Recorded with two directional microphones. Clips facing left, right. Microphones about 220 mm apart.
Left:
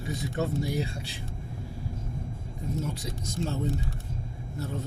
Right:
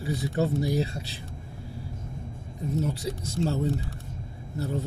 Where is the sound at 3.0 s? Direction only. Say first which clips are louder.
Right 4 dB; 35° right (ahead or behind).